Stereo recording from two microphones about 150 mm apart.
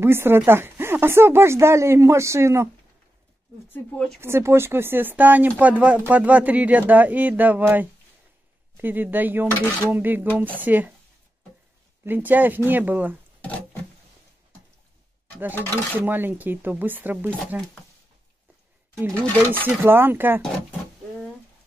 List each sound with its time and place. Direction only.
0.0 s speech: 15° right (ahead or behind)
3.7 s speech: 10° left (ahead or behind)
4.2 s speech: 15° right (ahead or behind)
12.0 s speech: 10° right (ahead or behind)
15.9 s speech: 15° right (ahead or behind)
19.4 s speech: 15° right (ahead or behind)